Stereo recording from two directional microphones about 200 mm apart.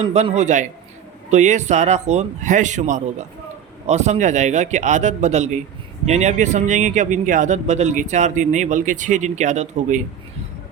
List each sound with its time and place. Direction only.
0.0 s speech: 30° right (ahead or behind)